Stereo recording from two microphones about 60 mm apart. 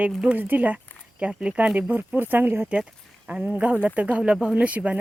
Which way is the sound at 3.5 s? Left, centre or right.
Right.